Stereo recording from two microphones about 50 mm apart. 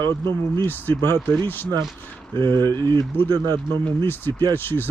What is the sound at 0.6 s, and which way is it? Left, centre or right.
Speech, left.